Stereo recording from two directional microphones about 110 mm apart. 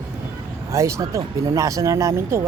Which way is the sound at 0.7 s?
25° right (ahead or behind).